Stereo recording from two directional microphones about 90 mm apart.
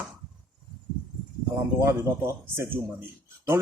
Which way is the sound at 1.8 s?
30° right (ahead or behind).